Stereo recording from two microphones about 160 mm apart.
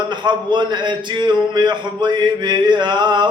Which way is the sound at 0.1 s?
30° right (ahead or behind).